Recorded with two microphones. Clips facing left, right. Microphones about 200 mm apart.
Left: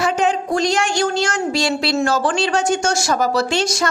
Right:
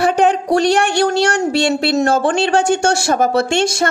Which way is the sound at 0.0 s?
60° right (ahead or behind).